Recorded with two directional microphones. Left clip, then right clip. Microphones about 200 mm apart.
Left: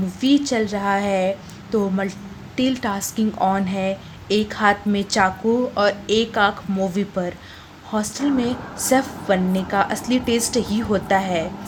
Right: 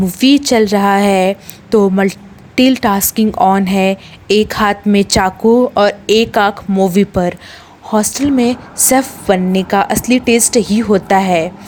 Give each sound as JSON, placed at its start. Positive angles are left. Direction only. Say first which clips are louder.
{"t": 0.1, "sound": "a woman's voice", "louder": "right 8 dB", "side_deg": -45}